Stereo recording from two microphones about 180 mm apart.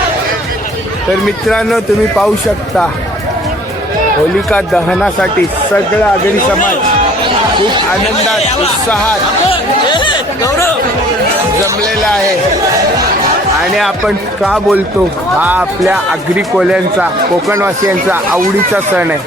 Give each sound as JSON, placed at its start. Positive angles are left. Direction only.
{"t": 1.5, "sound": "speech", "side_deg": 5}
{"t": 4.4, "sound": "speech", "side_deg": 5}
{"t": 9.5, "sound": "chatter", "side_deg": 25}
{"t": 13.7, "sound": "speech", "side_deg": 0}
{"t": 18.7, "sound": "speech", "side_deg": -10}